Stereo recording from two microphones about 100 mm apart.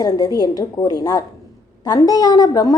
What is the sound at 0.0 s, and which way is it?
A woman's voice, 40° left (ahead or behind).